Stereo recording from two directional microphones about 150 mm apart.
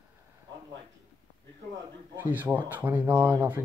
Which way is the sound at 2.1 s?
15° right (ahead or behind).